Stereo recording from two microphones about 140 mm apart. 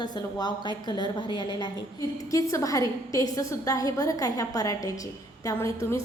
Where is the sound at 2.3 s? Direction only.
20° left (ahead or behind).